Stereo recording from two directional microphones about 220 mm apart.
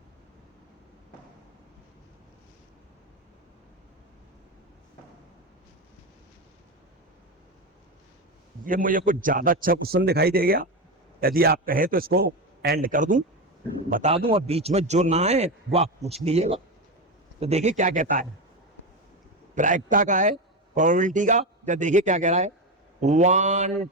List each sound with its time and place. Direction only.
8.6 s a man's voice: 40° right (ahead or behind)
19.5 s a man's voice: 35° right (ahead or behind)